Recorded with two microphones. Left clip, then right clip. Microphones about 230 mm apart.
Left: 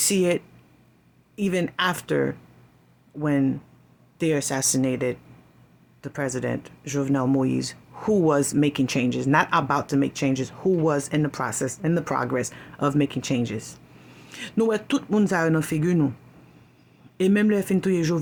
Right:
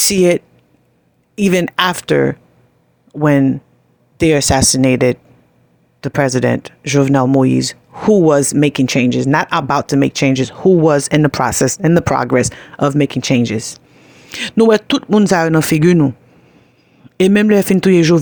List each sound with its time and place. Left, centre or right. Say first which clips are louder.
0.0 s speech: right 10 dB; right
17.2 s speech: right 11 dB; right